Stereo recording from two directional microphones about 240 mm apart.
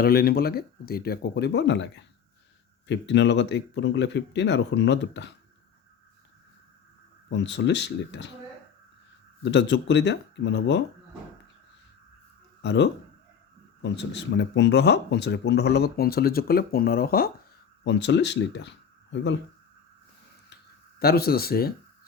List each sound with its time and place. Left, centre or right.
0.0 s speech: left
7.3 s speech: left
9.4 s speech: left
12.6 s speech: left
21.0 s speech: left